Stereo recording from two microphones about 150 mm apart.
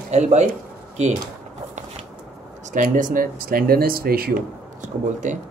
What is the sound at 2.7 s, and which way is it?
Speech, 60° right (ahead or behind).